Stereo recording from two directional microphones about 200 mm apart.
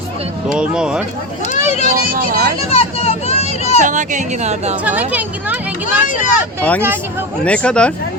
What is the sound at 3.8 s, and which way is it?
Speech, 40° right (ahead or behind).